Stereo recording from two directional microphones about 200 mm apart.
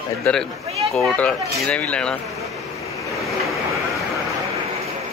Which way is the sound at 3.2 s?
Centre (ahead or behind).